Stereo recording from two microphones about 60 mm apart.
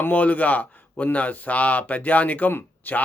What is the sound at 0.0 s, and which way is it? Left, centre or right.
Speech, left.